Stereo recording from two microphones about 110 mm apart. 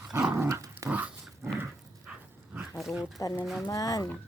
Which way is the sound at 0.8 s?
15° right (ahead or behind).